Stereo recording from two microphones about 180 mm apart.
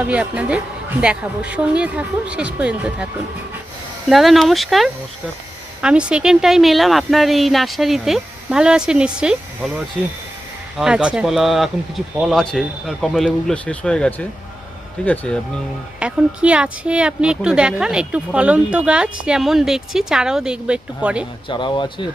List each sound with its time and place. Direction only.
0.0 s a woman's voice: 5° right (ahead or behind)
4.1 s speech: centre (ahead or behind)
10.8 s speech: 5° right (ahead or behind)
16.0 s speech: 5° right (ahead or behind)
21.5 s speech: 25° left (ahead or behind)